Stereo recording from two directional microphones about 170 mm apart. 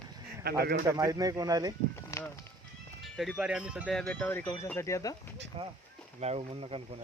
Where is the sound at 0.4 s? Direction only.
65° right (ahead or behind).